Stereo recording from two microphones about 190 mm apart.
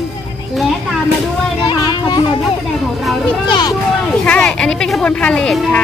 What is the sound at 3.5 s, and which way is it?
Speech, 20° left (ahead or behind).